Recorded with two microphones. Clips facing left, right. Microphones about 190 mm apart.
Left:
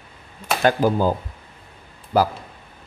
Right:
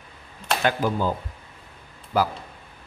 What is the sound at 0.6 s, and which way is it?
Speech, 40° left (ahead or behind).